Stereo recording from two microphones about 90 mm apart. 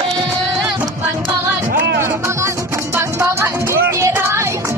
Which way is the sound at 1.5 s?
30° right (ahead or behind).